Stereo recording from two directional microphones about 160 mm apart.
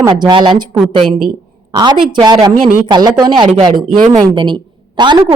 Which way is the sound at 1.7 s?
25° right (ahead or behind).